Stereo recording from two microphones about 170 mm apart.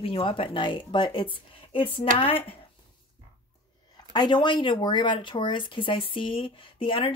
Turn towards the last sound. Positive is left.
turn(degrees=30)  # may be behind; listen again after turning